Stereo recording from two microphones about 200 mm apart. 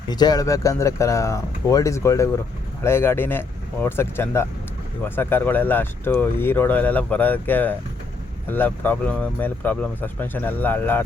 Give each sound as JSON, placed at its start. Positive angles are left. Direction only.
{"t": 0.1, "sound": "speech", "side_deg": 20}